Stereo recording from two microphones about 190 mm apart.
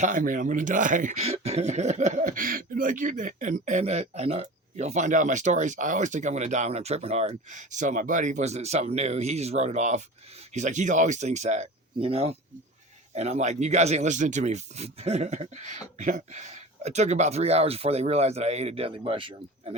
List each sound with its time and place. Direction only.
0.0 s speech: 45° right (ahead or behind); by 19.7 s 25° right (ahead or behind)